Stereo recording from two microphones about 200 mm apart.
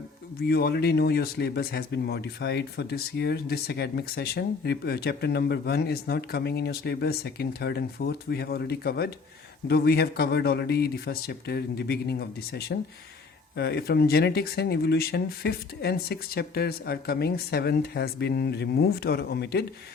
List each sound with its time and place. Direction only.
0.4 s speech: 55° left (ahead or behind)